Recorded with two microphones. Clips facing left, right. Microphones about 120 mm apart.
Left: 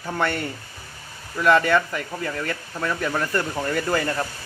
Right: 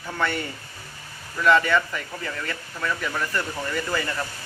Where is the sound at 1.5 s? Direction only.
40° left (ahead or behind).